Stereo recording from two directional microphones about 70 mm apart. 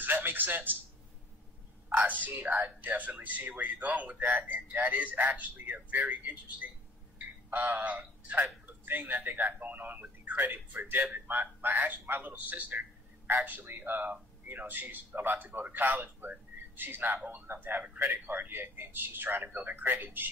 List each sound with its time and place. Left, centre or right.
0.0 s a man's voice: right
1.9 s a man's voice: right